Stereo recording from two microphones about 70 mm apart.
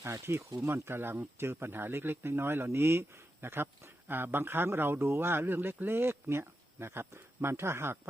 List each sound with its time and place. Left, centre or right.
0.0 s speech: right